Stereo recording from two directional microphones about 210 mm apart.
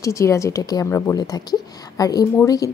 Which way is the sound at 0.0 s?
15° left (ahead or behind).